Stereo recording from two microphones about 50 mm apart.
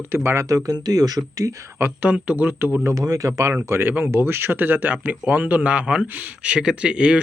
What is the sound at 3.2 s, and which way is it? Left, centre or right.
Speech, right.